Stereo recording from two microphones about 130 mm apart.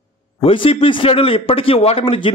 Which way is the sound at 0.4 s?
45° left (ahead or behind).